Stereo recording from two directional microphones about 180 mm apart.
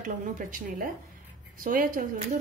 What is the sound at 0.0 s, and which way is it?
A woman's voice, 45° right (ahead or behind).